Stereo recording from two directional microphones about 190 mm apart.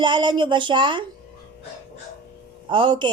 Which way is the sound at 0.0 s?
25° right (ahead or behind).